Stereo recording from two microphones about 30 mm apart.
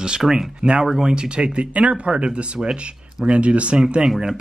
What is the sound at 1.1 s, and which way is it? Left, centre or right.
Speech, right.